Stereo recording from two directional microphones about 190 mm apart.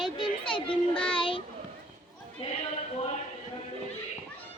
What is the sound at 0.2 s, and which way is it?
Children playing, 25° left (ahead or behind).